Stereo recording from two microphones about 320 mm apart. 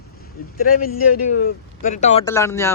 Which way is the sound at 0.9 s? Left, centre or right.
Left.